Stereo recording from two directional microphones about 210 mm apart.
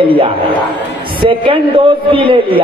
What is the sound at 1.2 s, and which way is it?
A man's voice, 25° right (ahead or behind).